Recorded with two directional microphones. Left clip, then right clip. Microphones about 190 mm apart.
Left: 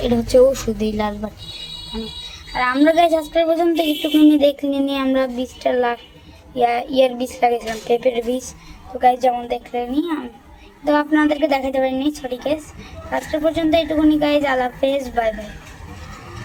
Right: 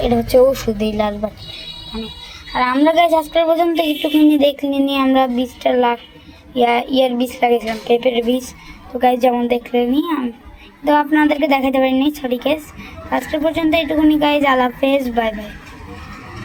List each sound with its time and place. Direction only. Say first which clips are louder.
0.0 s a woman's voice: right 1 dB; centre (ahead or behind)
2.6 s a woman's voice: right 1 dB; 10° right (ahead or behind)
9.0 s speech: right 1 dB; 15° right (ahead or behind)